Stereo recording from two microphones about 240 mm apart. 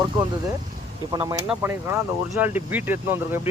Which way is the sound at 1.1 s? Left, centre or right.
Centre.